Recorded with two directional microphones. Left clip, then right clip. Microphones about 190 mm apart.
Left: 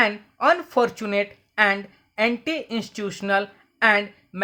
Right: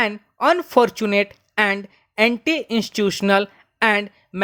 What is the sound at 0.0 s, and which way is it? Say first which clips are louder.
Speech: right 1 dB; 35° right (ahead or behind).